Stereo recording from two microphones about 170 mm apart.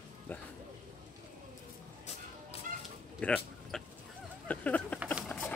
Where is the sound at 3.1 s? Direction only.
5° left (ahead or behind).